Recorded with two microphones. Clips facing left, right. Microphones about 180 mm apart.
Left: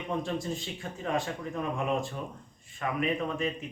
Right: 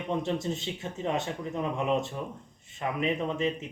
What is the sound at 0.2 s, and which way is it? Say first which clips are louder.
Speech: right 2 dB; 25° right (ahead or behind).